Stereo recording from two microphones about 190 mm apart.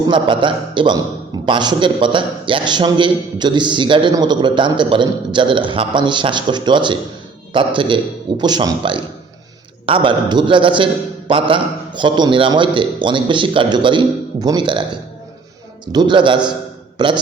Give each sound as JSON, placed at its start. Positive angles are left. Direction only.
{"t": 0.1, "sound": "a man's voice", "side_deg": -25}
{"t": 15.9, "sound": "a man's voice", "side_deg": -25}